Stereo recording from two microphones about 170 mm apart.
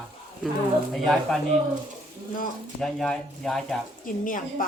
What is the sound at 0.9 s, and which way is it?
Speech, centre (ahead or behind).